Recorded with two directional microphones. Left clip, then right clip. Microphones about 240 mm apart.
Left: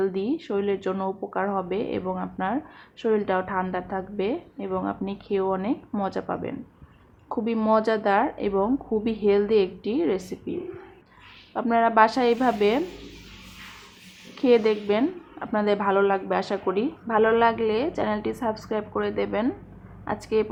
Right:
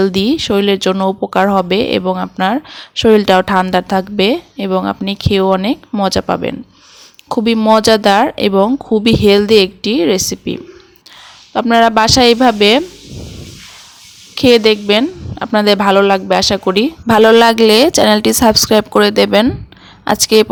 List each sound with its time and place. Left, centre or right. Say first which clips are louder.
0.0 s speech: right 13 dB; right
11.5 s speech: right 10 dB; right
14.3 s speech: right 11 dB; right